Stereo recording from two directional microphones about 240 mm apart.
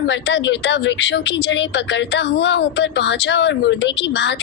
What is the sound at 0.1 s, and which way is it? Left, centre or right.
Speech, left.